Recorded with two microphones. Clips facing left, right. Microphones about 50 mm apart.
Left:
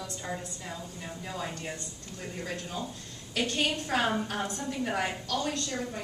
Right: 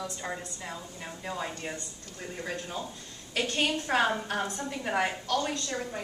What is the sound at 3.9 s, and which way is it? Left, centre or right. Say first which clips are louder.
Speech: right 3 dB; right.